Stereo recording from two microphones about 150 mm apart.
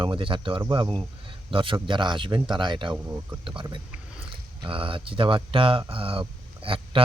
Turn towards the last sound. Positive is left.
turn(degrees=-35)  # may be behind; listen again after turning